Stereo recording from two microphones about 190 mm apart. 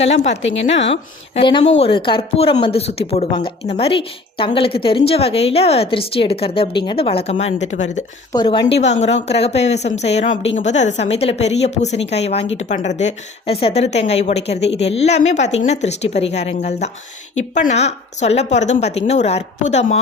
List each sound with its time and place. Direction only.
0.0 s speech: 35° left (ahead or behind)
0.4 s a woman's voice: 80° left
1.4 s speech: 25° left (ahead or behind)
8.3 s speech: 25° left (ahead or behind)
8.6 s speech: 35° left (ahead or behind)